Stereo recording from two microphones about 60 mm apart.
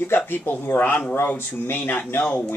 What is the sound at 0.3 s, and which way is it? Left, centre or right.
Speech, left.